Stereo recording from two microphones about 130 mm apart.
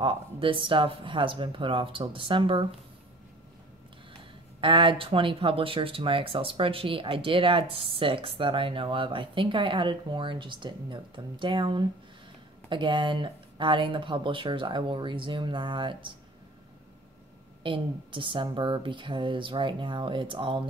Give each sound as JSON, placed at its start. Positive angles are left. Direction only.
{"t": 0.0, "sound": "speech", "side_deg": -40}
{"t": 4.2, "sound": "speech", "side_deg": -40}
{"t": 17.6, "sound": "speech", "side_deg": -40}